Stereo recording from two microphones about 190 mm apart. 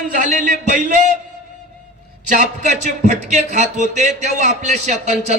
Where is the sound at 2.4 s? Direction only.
40° right (ahead or behind).